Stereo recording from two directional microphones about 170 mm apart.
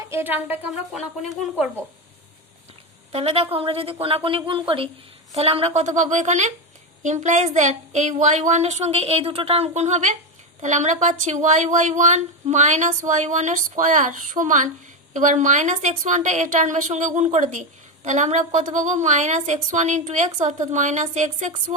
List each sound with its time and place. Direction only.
0.0 s speech: 15° right (ahead or behind)
3.1 s a woman's voice: 35° right (ahead or behind)